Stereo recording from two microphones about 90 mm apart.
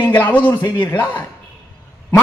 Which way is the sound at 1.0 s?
20° left (ahead or behind).